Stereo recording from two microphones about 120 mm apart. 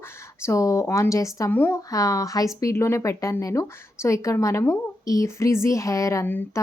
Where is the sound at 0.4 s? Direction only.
25° left (ahead or behind).